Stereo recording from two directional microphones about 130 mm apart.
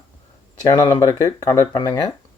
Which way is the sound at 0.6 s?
35° left (ahead or behind).